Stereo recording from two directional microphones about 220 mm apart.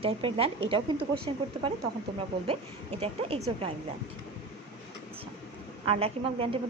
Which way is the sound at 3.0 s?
25° right (ahead or behind).